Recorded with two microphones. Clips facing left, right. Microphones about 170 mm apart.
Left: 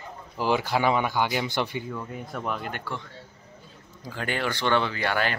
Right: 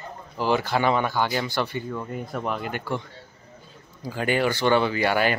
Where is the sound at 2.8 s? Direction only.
15° right (ahead or behind).